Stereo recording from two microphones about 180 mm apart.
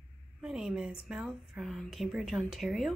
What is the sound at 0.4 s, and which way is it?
Speech, centre (ahead or behind).